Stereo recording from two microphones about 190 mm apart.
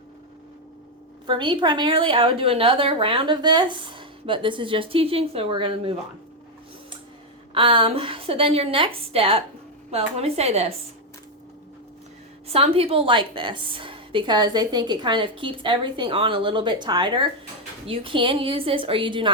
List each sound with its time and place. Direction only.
1.3 s a woman's voice: 25° right (ahead or behind)
7.5 s a woman's voice: 25° right (ahead or behind)
12.5 s a woman's voice: 30° right (ahead or behind)